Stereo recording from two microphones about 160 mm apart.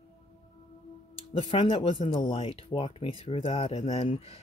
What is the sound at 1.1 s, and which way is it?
Speech, 35° left (ahead or behind).